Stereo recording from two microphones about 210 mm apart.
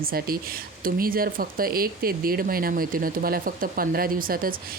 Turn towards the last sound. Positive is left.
turn(degrees=-45)  # may be behind; listen again after turning